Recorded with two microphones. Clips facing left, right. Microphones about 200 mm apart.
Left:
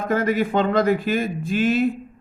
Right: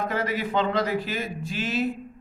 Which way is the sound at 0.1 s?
50° left (ahead or behind).